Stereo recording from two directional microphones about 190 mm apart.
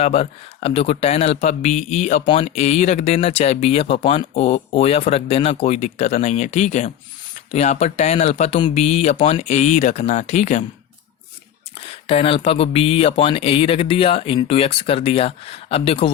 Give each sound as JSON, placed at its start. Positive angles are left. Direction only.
{"t": 0.0, "sound": "speech", "side_deg": 30}
{"t": 12.0, "sound": "speech", "side_deg": 30}